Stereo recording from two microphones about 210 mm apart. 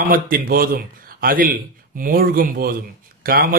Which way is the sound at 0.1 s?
45° right (ahead or behind).